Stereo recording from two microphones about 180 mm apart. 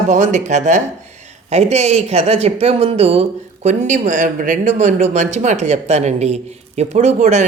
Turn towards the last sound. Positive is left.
turn(degrees=-40)  # may be behind; listen again after turning